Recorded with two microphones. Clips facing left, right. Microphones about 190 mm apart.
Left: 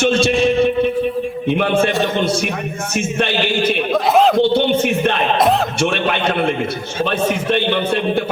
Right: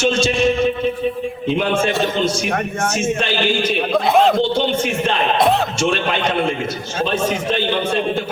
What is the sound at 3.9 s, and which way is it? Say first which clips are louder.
Speech: left 1 dB; centre (ahead or behind).